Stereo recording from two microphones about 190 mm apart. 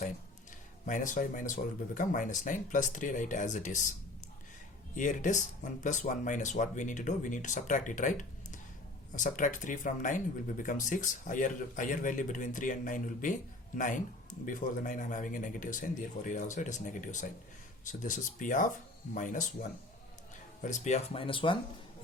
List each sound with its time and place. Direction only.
0.9 s a man's voice: 40° left (ahead or behind)
4.9 s a man's voice: 40° left (ahead or behind)
20.6 s speech: 40° left (ahead or behind)